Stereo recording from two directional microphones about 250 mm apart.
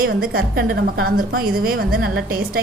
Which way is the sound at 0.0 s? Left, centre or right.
Right.